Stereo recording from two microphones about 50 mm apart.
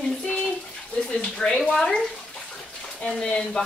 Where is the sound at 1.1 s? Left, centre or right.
Centre.